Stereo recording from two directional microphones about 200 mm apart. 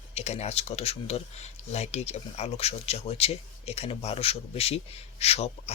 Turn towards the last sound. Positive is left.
turn(degrees=30)  # may be behind; listen again after turning